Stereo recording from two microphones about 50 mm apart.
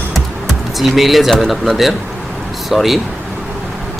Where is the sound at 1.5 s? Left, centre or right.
Centre.